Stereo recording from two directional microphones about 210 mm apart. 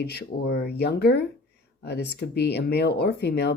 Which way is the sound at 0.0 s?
50° left (ahead or behind).